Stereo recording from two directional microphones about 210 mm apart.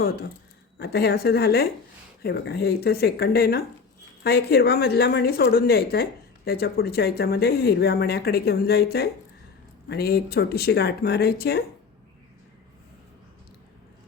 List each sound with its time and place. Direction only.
0.8 s a woman's voice: 50° left (ahead or behind)